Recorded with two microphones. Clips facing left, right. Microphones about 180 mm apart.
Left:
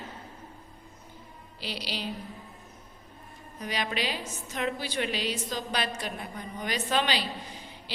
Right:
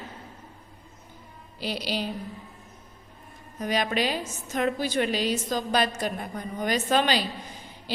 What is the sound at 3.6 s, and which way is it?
A woman's voice, 45° right (ahead or behind).